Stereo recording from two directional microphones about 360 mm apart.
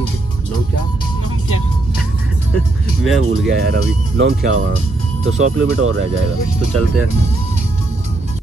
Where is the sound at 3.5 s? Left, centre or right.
Right.